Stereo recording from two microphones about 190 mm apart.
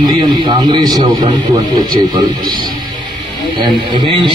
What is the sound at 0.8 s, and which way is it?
Speech, centre (ahead or behind).